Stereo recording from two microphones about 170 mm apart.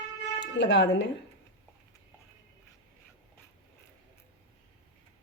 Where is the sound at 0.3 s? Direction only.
90° left.